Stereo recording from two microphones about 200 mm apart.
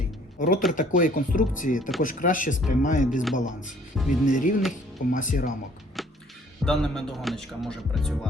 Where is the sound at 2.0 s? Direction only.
40° left (ahead or behind).